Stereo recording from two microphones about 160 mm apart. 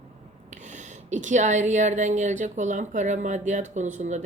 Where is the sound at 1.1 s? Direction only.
50° right (ahead or behind).